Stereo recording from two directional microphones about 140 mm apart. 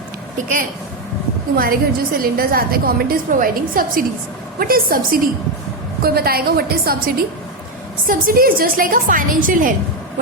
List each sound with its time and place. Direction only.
1.5 s a woman's voice: 90° right
8.0 s a woman's voice: 90° right; by 9.7 s 70° right (ahead or behind)